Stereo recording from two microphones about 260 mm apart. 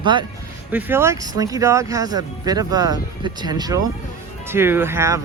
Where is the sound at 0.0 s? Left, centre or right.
Centre.